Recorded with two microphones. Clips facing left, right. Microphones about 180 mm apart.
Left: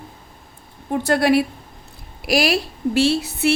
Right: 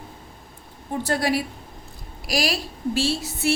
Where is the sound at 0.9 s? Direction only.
65° left (ahead or behind).